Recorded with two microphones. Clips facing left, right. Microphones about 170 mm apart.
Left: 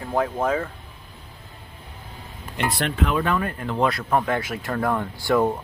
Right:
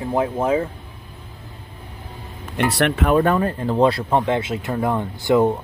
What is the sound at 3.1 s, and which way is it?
Speech, 35° right (ahead or behind).